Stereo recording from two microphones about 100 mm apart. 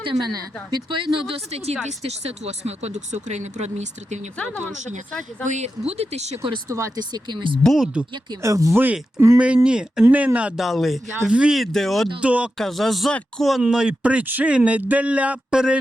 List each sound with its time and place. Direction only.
0.0 s speech: 45° right (ahead or behind)
1.5 s speech: 90° right
5.6 s speech: 90° right
6.7 s speech: 35° right (ahead or behind)
7.1 s speech: 50° right (ahead or behind)
7.6 s speech: centre (ahead or behind)
8.4 s speech: 30° right (ahead or behind)
8.7 s speech: 20° right (ahead or behind)
9.1 s speech: 30° right (ahead or behind)
9.6 s speech: 10° right (ahead or behind)
10.6 s speech: centre (ahead or behind)
12.2 s speech: 10° right (ahead or behind)
12.5 s speech: 5° left (ahead or behind)